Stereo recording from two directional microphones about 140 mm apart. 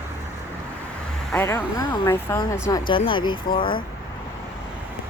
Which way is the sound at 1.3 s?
15° left (ahead or behind).